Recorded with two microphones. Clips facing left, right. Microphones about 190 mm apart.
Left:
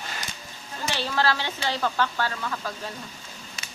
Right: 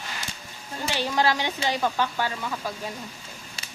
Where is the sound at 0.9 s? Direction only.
15° right (ahead or behind).